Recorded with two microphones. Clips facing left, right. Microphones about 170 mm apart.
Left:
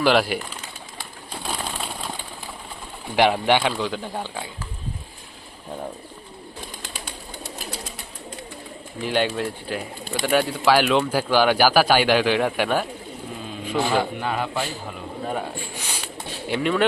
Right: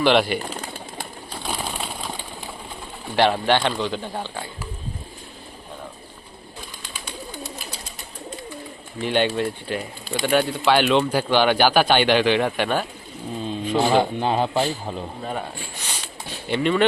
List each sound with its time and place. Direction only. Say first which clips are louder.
0.0 s speech: right 1 dB; 5° left (ahead or behind)
0.5 s bird: right 6 dB; 50° right (ahead or behind)
1.5 s bird: right 1 dB; 5° right (ahead or behind)
3.2 s speech: even; 10° left (ahead or behind)
9.0 s speech: right 2 dB; centre (ahead or behind)
13.7 s a man's voice: right 3 dB; 25° right (ahead or behind)
15.2 s speech: left 2 dB; 5° left (ahead or behind)